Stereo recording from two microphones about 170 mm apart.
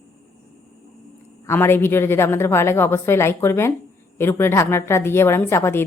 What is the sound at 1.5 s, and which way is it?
A woman's voice, 15° left (ahead or behind).